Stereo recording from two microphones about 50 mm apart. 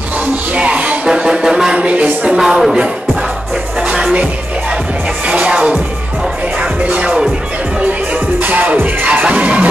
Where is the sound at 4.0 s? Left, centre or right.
Right.